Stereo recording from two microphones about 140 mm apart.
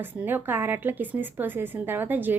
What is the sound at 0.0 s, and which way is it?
A woman's voice, 15° right (ahead or behind).